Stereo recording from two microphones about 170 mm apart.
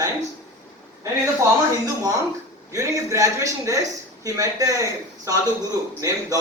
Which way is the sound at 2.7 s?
20° right (ahead or behind).